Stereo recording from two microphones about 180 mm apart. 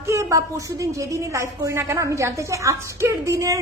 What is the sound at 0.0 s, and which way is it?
A woman's voice, 15° right (ahead or behind).